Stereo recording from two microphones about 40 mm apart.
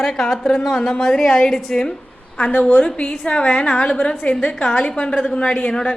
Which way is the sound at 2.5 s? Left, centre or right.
Left.